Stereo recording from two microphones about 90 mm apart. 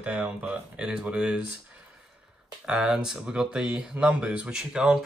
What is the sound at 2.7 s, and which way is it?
Speech, 5° right (ahead or behind).